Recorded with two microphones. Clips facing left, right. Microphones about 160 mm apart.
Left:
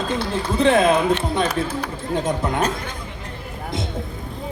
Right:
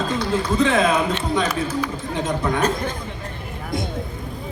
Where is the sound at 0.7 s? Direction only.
55° left (ahead or behind).